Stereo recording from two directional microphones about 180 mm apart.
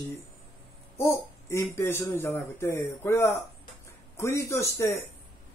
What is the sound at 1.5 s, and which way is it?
Speech, 15° left (ahead or behind).